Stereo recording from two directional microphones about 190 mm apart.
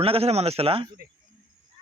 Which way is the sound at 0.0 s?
30° right (ahead or behind).